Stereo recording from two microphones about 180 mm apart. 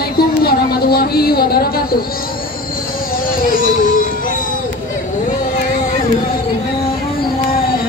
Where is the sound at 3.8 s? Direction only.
50° left (ahead or behind).